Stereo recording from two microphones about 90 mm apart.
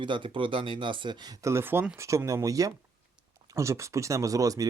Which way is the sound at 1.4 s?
30° right (ahead or behind).